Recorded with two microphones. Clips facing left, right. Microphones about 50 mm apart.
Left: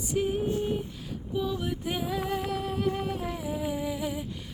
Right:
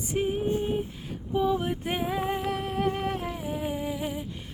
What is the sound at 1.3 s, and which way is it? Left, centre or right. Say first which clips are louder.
Lullaby: right 5 dB; right.